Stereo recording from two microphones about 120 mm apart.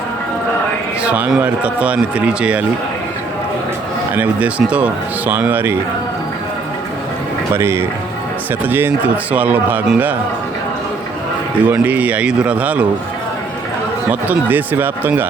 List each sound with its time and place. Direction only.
1.0 s speech: 15° right (ahead or behind)
4.1 s speech: 10° right (ahead or behind)
7.5 s speech: 20° right (ahead or behind)
9.3 s speech: 15° right (ahead or behind)
11.6 s speech: 15° right (ahead or behind)
14.1 s speech: 15° right (ahead or behind)